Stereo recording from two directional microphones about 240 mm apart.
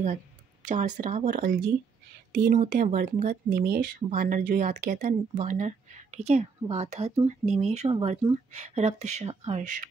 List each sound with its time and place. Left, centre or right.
0.7 s speech: right